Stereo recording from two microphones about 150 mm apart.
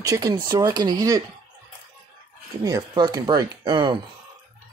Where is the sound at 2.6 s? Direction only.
25° right (ahead or behind).